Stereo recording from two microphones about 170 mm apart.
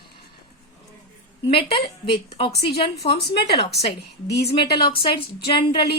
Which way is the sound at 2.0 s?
30° left (ahead or behind).